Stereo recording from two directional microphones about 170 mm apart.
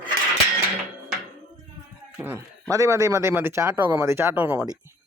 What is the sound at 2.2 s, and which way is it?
Speech, 10° right (ahead or behind).